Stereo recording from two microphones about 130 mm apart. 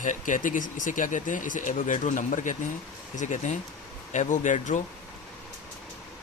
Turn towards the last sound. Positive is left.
turn(degrees=70)  # may be behind; listen again after turning